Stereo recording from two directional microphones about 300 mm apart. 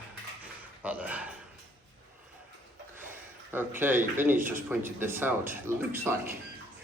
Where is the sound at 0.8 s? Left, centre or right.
Centre.